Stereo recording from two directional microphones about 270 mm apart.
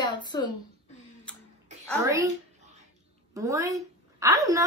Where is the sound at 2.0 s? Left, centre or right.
Centre.